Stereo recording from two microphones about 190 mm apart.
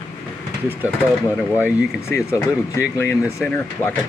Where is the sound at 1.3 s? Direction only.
10° left (ahead or behind).